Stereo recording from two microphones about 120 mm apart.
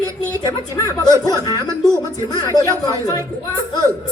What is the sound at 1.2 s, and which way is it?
Speech, 35° left (ahead or behind).